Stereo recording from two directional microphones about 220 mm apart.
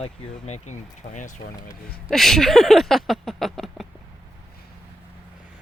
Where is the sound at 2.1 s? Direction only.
Centre (ahead or behind).